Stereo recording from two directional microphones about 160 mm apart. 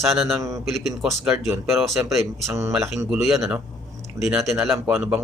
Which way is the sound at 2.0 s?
10° right (ahead or behind).